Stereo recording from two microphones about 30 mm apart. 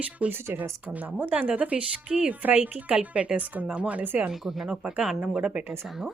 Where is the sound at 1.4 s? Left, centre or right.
Right.